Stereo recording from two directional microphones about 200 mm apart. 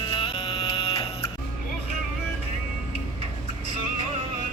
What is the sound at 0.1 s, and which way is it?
Music, 25° left (ahead or behind).